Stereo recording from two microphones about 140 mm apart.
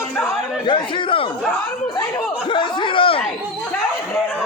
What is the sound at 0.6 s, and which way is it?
Speech, 35° left (ahead or behind).